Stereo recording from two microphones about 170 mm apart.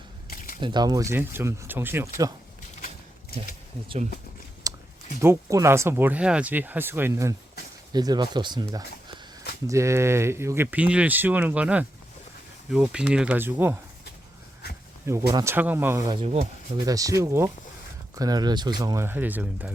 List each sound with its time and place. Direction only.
0.3 s a sound: 55° left (ahead or behind)
0.6 s speech: 25° right (ahead or behind)
4.7 s a sound: 20° right (ahead or behind)
5.2 s speech: 15° right (ahead or behind)
15.0 s speech: 20° right (ahead or behind)
16.2 s speech: 35° right (ahead or behind)
16.7 s speech: 20° right (ahead or behind)